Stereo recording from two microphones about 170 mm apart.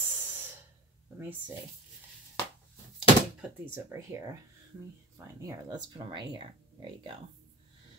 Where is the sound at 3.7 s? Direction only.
15° right (ahead or behind).